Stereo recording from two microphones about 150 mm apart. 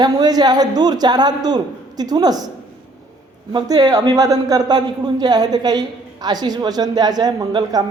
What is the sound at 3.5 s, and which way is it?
A man's voice, 25° right (ahead or behind).